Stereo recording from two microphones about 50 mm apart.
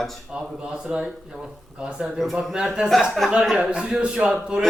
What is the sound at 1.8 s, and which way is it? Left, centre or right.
Speech, centre.